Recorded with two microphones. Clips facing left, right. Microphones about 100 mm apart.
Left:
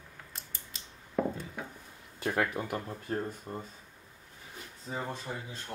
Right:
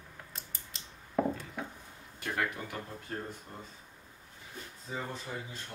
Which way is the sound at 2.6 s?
50° left (ahead or behind).